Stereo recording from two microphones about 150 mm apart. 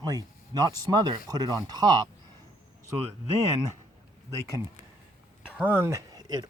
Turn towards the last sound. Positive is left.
turn(degrees=-25)  # may be behind; listen again after turning